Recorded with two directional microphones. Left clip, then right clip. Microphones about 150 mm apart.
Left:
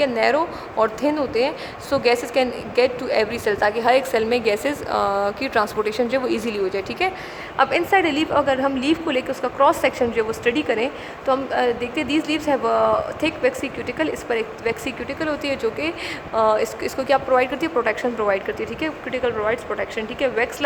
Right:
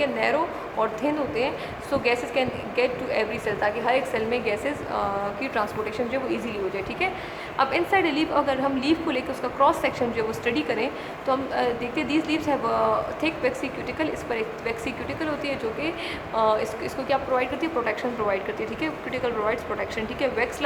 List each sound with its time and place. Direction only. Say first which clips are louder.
0.0 s speech: left 5 dB; 65° left (ahead or behind)
7.6 s speech: left 4 dB; 45° left (ahead or behind)